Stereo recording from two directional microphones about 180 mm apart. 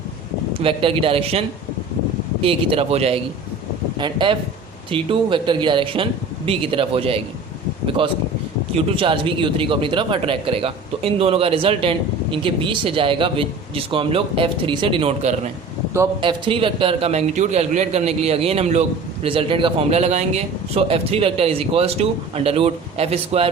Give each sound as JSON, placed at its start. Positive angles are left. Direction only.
{"t": 0.6, "sound": "a man's voice", "side_deg": -30}